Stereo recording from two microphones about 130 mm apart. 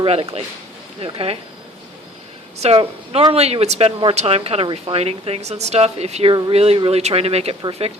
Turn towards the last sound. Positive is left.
turn(degrees=-50)  # may be behind; listen again after turning